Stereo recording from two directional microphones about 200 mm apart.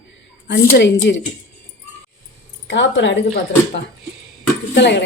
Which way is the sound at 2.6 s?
65° left (ahead or behind).